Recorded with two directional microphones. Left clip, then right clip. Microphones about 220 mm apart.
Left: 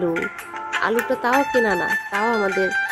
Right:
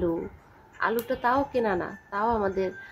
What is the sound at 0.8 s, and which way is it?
Speech, 25° left (ahead or behind).